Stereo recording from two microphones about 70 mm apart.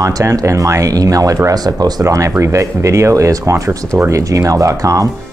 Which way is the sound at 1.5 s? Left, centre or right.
Right.